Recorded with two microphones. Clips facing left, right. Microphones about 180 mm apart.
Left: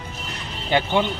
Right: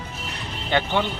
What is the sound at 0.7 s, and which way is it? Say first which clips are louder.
Speech: left 2 dB; 15° left (ahead or behind).